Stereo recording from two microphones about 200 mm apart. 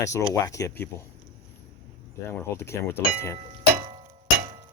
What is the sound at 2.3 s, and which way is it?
Speech, 10° left (ahead or behind).